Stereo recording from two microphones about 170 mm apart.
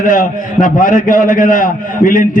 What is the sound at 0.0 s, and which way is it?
A man's voice, 50° left (ahead or behind).